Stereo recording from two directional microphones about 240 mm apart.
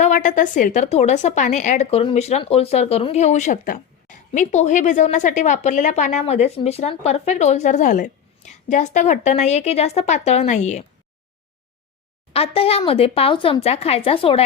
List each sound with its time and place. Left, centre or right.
0.0 s a woman's voice: left
12.3 s a woman's voice: left